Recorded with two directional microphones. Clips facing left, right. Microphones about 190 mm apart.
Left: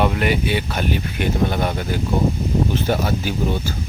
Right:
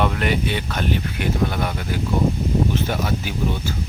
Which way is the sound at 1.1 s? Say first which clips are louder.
Left 2 dB; 25° left (ahead or behind).